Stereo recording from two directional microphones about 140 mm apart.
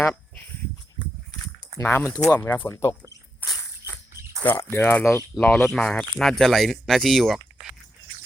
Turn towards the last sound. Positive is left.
turn(degrees=0)  # may be behind; listen again after turning